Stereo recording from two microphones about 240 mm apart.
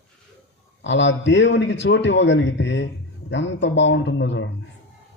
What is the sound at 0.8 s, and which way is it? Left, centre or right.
A man's voice, left.